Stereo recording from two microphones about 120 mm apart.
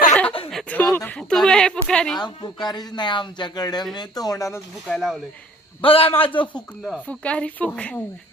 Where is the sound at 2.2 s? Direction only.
35° left (ahead or behind).